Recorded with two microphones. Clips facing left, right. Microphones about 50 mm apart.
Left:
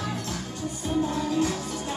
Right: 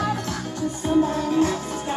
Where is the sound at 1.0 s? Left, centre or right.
Right.